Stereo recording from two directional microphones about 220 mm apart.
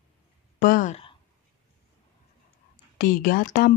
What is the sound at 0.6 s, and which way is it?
Speech, 40° left (ahead or behind).